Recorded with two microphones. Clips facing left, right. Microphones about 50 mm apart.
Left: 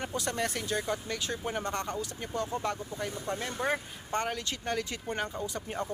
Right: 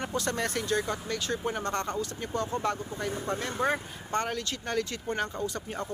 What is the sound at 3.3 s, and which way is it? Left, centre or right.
Speech, centre.